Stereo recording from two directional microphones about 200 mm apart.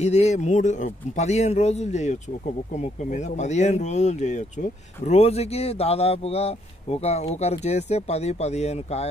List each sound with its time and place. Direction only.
0.0 s speech: 35° left (ahead or behind)